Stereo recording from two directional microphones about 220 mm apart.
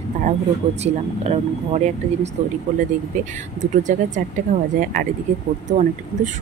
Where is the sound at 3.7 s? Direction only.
35° right (ahead or behind).